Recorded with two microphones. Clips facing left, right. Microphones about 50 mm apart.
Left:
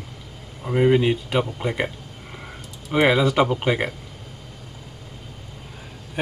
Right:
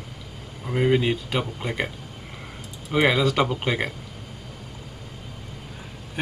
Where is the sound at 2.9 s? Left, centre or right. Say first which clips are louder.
Left 3 dB; centre.